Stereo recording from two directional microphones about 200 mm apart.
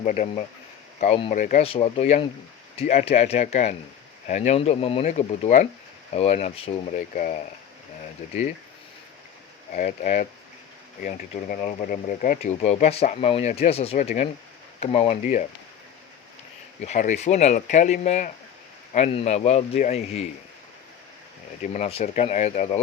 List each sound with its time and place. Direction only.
0.0 s speech: 40° left (ahead or behind)
1.6 s speech: 30° left (ahead or behind)
9.7 s speech: 40° left (ahead or behind)
16.8 s speech: 35° left (ahead or behind)
21.6 s speech: 35° left (ahead or behind)